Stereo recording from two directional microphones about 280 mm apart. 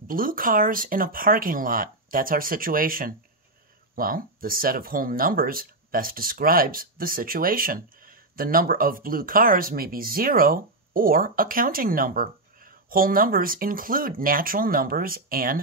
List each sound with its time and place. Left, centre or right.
0.1 s speech: right